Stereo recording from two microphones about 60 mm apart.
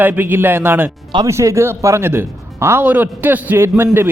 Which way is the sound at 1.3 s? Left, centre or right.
Right.